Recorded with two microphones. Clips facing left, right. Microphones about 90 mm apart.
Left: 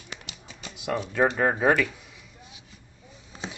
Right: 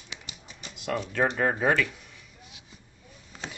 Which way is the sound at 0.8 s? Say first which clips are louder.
Left 3 dB; 15° left (ahead or behind).